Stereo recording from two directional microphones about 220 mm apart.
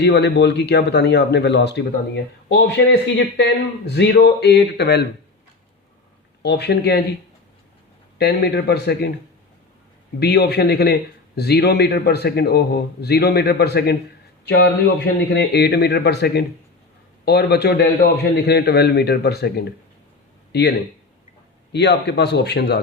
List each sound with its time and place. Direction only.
0.0 s a man's voice: 50° left (ahead or behind)
6.4 s a man's voice: 50° left (ahead or behind)
8.2 s a man's voice: 50° left (ahead or behind)
10.2 s a man's voice: 50° left (ahead or behind)